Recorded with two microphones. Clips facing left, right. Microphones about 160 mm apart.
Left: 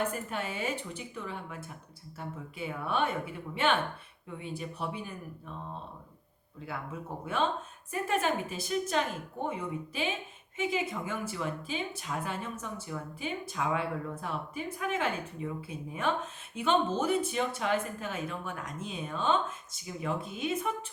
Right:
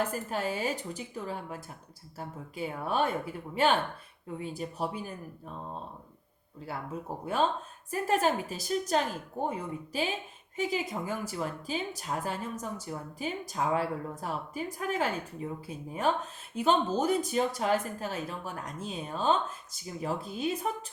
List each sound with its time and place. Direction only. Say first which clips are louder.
0.0 s a woman's voice: right 2 dB; 35° right (ahead or behind)
6.7 s a woman's voice: right 2 dB; 35° right (ahead or behind)